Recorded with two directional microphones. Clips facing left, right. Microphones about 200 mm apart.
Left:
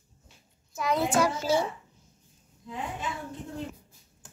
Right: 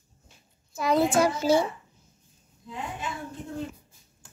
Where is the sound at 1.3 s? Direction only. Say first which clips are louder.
Right 4 dB; 15° right (ahead or behind).